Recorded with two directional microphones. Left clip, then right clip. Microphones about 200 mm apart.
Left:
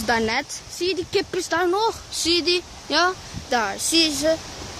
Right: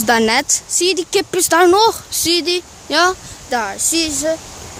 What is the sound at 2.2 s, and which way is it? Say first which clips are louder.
Speech: right 4 dB; 15° right (ahead or behind).